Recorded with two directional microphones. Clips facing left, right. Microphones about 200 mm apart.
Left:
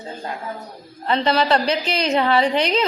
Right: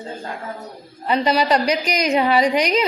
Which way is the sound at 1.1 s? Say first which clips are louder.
Right 1 dB; 10° right (ahead or behind).